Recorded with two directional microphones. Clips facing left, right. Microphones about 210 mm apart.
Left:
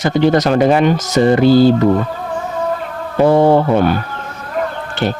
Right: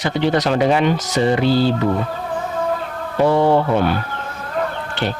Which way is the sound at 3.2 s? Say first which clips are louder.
Left 4 dB; 45° left (ahead or behind).